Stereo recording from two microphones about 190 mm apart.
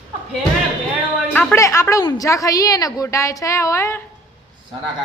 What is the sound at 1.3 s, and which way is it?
A woman's voice, 10° left (ahead or behind).